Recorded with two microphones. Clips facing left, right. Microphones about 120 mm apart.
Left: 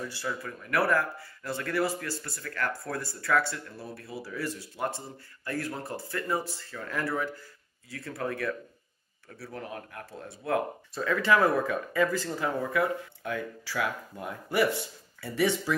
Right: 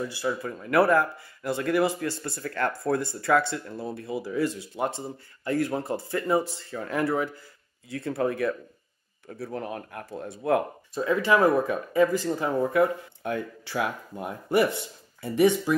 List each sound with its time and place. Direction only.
0.3 s speech: 25° right (ahead or behind)